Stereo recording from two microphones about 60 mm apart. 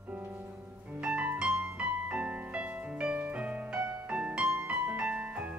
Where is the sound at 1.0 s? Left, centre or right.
Right.